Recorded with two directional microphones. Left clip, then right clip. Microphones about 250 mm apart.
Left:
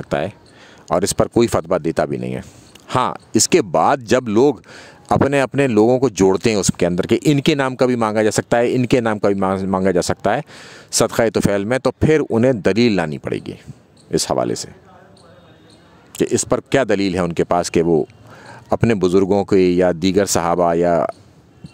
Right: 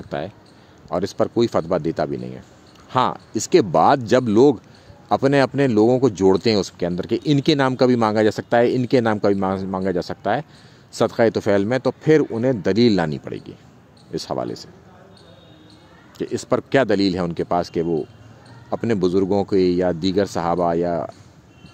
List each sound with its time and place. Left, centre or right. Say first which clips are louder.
0.0 s speech: left 7 dB; left
16.2 s speech: left 4 dB; left